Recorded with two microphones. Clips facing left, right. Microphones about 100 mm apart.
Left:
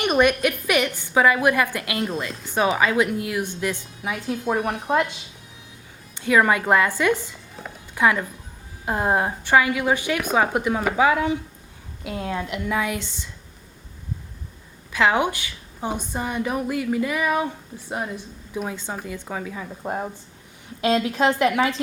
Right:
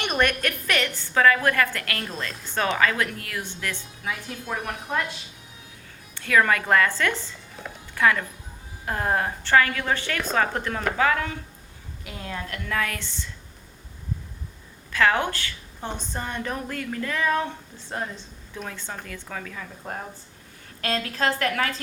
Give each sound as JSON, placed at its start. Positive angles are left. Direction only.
{"t": 0.0, "sound": "a woman's voice", "side_deg": 10}
{"t": 6.1, "sound": "a woman's voice", "side_deg": 20}
{"t": 7.6, "sound": "a sound", "side_deg": 0}
{"t": 7.9, "sound": "a woman's voice", "side_deg": 20}
{"t": 14.9, "sound": "a woman's voice", "side_deg": 15}